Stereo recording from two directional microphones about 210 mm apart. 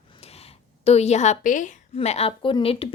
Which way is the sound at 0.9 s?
30° left (ahead or behind).